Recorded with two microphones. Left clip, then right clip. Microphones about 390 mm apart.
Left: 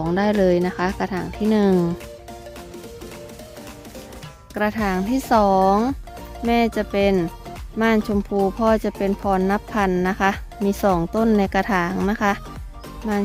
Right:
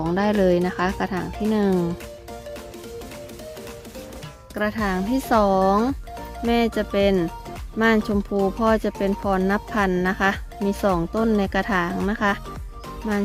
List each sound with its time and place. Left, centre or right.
0.0 s speech: centre
4.5 s speech: centre